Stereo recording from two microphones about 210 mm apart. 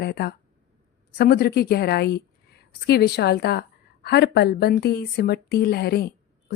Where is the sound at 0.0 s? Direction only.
50° left (ahead or behind).